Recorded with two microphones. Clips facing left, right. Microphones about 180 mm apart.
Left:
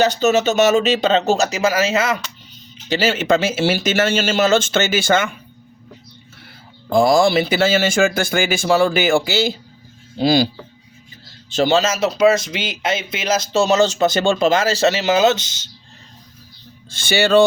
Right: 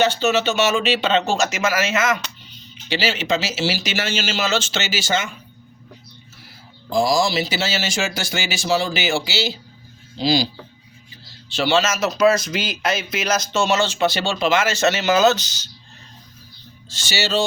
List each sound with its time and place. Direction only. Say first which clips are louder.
0.0 s speech: left 3 dB; 40° left (ahead or behind)
2.9 s speech: left 5 dB; 50° left (ahead or behind)
6.9 s speech: left 5 dB; 55° left (ahead or behind)
11.4 s speech: left 3 dB; 45° left (ahead or behind); by 15.7 s 25° left (ahead or behind)
16.9 s speech: left 8 dB; 55° left (ahead or behind)